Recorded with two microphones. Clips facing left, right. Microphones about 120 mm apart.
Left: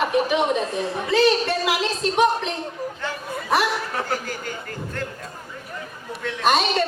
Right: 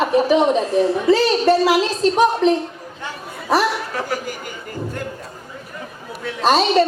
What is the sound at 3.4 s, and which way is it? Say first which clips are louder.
Chuckle: right 4 dB; 35° right (ahead or behind).